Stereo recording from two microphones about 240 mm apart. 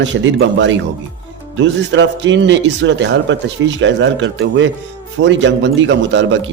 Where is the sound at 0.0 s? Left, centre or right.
Right.